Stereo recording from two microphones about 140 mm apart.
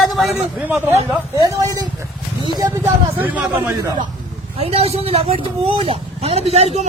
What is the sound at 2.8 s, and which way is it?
Speech, 10° right (ahead or behind).